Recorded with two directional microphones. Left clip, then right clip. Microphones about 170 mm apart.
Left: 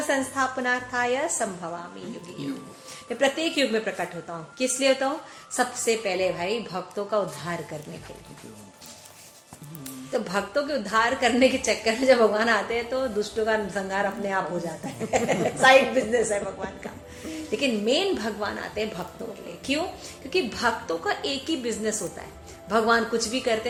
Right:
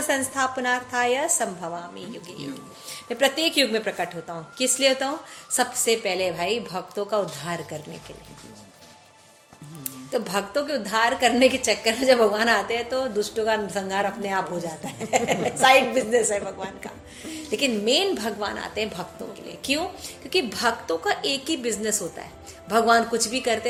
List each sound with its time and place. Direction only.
0.1 s a woman's voice: 45° right (ahead or behind)
3.1 s a woman's voice: 50° right (ahead or behind)
10.1 s a woman's voice: 45° right (ahead or behind)